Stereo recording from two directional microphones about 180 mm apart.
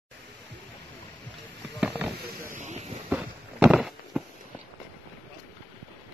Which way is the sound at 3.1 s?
5° right (ahead or behind).